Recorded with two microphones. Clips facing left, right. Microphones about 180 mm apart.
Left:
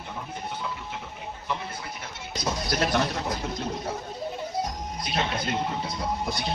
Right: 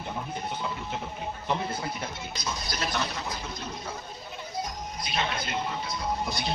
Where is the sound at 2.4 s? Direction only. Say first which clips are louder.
Left 7 dB; 65° left (ahead or behind); by 3.3 s 50° left (ahead or behind).